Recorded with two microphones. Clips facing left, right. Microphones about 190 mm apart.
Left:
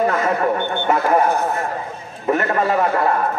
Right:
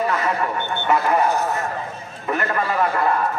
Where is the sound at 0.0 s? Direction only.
45° left (ahead or behind).